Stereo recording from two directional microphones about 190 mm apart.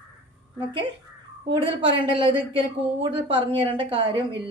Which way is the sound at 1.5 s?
25° right (ahead or behind).